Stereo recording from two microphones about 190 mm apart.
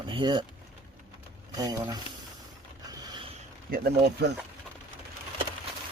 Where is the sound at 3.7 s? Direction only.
60° right (ahead or behind).